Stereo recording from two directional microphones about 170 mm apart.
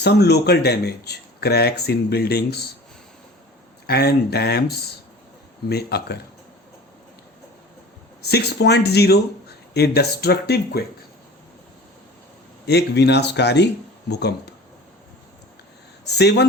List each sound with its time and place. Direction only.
0.0 s speech: 75° left (ahead or behind)
3.8 s speech: 70° left (ahead or behind)
5.6 s speech: 70° left (ahead or behind)
8.2 s speech: 70° left (ahead or behind)
12.6 s speech: 75° left (ahead or behind)
16.1 s speech: 75° left (ahead or behind)